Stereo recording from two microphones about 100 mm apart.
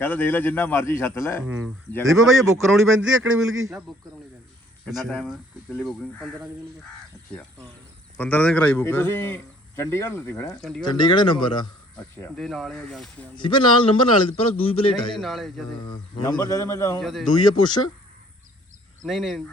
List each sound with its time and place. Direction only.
0.0 s speech: 20° left (ahead or behind)
2.0 s a man's voice: 5° right (ahead or behind)
8.1 s a man's voice: 15° left (ahead or behind)
8.8 s speech: 25° left (ahead or behind)
10.6 s a man's voice: 5° left (ahead or behind)
10.8 s speech: 50° left (ahead or behind)
12.4 s a man's voice: centre (ahead or behind)
13.3 s a man's voice: 55° left (ahead or behind)
15.2 s a man's voice: centre (ahead or behind)
16.4 s speech: 30° left (ahead or behind)
17.0 s a man's voice: centre (ahead or behind)
17.2 s speech: 50° left (ahead or behind)
19.0 s a man's voice: centre (ahead or behind)